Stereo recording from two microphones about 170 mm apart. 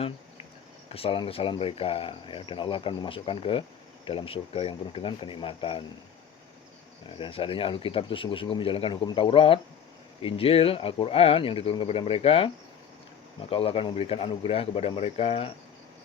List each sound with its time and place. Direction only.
0.9 s speech: 35° left (ahead or behind)
7.1 s speech: 30° left (ahead or behind)